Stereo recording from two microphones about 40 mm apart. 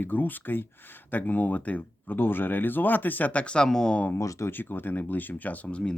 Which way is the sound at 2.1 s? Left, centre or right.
Left.